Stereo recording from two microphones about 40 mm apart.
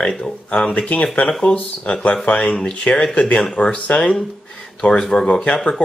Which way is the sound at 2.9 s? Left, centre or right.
Left.